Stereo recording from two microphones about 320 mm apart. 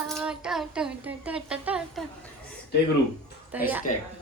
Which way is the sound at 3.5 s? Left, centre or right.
Centre.